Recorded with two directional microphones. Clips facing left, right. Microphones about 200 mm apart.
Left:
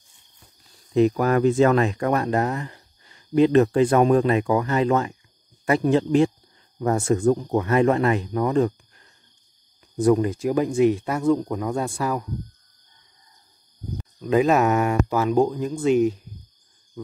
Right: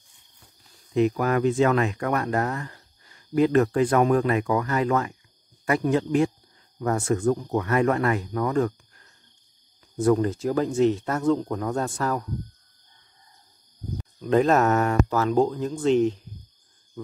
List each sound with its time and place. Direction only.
0.9 s speech: 35° left (ahead or behind); by 12.3 s 10° left (ahead or behind)
14.2 s speech: 5° left (ahead or behind)